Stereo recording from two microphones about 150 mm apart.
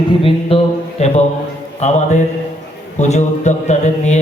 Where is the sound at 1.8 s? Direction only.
50° left (ahead or behind).